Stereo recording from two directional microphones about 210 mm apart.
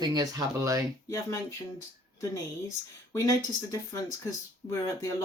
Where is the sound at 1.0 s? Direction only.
15° left (ahead or behind).